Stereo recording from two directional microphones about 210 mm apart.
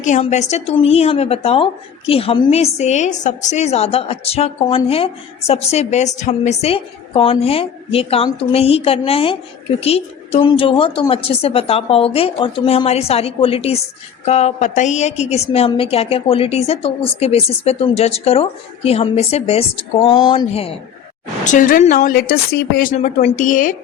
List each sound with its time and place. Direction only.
0.0 s a woman's voice: 35° left (ahead or behind)
21.4 s speech: 40° left (ahead or behind)